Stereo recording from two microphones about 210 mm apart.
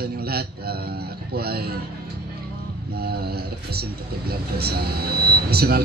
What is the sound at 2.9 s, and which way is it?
Speech, 50° right (ahead or behind).